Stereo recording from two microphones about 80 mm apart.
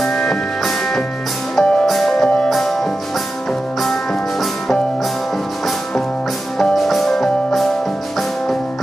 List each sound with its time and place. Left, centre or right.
0.0 s music: centre
1.5 s music: centre
6.6 s music: centre